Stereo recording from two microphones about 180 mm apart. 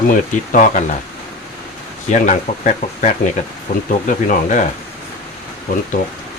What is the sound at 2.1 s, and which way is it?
Speech, 45° left (ahead or behind).